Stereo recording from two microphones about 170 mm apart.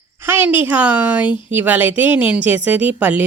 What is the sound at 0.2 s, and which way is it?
A woman's voice, 10° right (ahead or behind).